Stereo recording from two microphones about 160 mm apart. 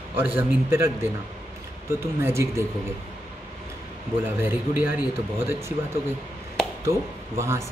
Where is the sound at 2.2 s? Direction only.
15° right (ahead or behind).